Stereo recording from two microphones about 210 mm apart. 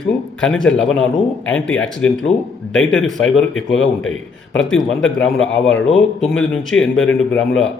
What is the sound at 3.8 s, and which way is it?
Speech, 65° left (ahead or behind).